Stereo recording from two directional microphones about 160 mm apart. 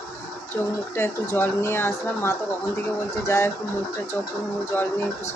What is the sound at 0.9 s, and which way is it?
Speech, 15° left (ahead or behind).